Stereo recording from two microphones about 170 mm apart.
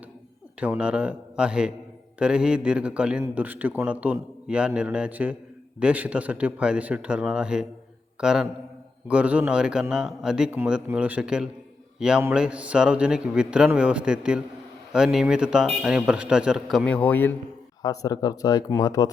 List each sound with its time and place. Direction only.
0.6 s a man's voice: 5° right (ahead or behind); by 17.3 s 10° left (ahead or behind)
17.8 s speech: 20° left (ahead or behind)